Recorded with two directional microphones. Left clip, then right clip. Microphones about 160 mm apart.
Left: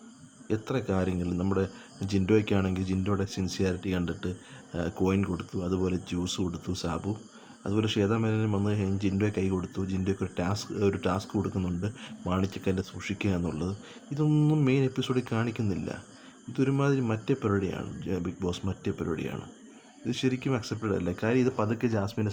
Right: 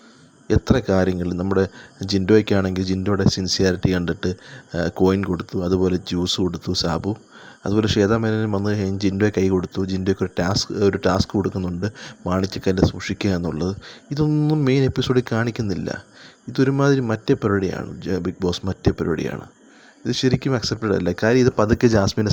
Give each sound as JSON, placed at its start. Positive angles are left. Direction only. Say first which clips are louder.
{"t": 0.4, "sound": "speech", "louder": "right 11 dB", "side_deg": -35}